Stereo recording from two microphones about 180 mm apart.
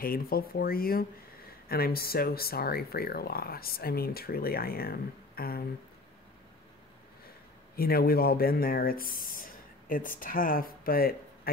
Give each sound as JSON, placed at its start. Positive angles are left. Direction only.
{"t": 0.0, "sound": "speech", "side_deg": 55}
{"t": 7.7, "sound": "speech", "side_deg": 55}